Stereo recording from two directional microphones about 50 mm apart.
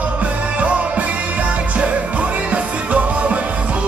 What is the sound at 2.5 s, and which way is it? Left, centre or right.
Music, right.